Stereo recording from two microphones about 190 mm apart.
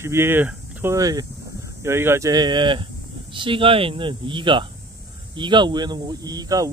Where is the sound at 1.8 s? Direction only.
15° right (ahead or behind).